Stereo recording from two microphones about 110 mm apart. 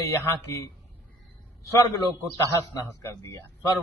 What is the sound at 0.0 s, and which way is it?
A man's voice, 25° left (ahead or behind).